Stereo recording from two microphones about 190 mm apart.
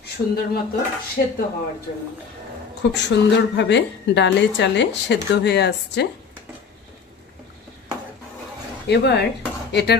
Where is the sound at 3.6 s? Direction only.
65° left (ahead or behind).